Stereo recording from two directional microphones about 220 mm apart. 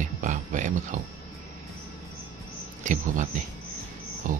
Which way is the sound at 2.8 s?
35° right (ahead or behind).